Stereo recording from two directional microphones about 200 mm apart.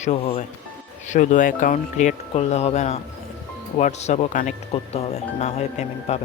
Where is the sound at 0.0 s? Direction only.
35° left (ahead or behind).